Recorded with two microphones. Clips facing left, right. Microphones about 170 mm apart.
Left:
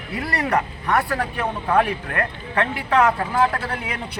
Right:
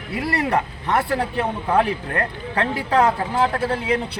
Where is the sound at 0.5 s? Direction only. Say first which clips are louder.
Even; 25° right (ahead or behind).